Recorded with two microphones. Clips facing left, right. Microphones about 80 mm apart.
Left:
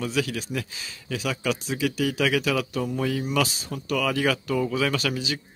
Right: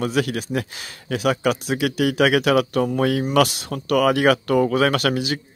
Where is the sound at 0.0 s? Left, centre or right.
Right.